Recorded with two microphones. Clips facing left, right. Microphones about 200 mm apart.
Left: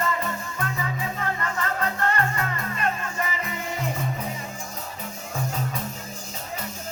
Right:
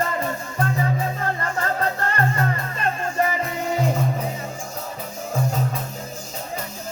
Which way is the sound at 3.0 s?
45° right (ahead or behind).